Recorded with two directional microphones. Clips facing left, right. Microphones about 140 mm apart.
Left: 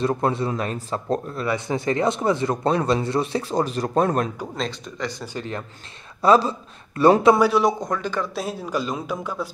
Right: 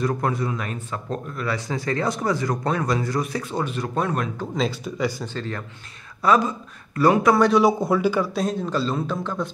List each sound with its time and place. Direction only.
0.0 s speech: 25° left (ahead or behind)
4.6 s speech: 5° right (ahead or behind)
5.2 s a man's voice: 15° left (ahead or behind)
6.2 s speech: 30° left (ahead or behind)
7.3 s speech: 5° left (ahead or behind)
8.4 s a man's voice: 5° left (ahead or behind)